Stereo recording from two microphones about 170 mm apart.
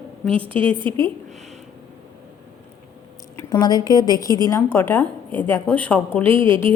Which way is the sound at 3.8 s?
25° left (ahead or behind).